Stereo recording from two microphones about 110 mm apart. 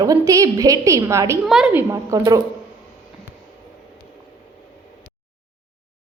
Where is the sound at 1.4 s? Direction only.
5° right (ahead or behind).